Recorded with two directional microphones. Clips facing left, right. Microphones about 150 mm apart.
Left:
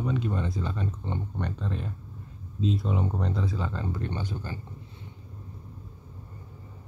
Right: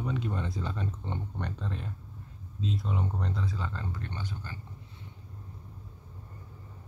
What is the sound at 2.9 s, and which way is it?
Speech, 15° left (ahead or behind).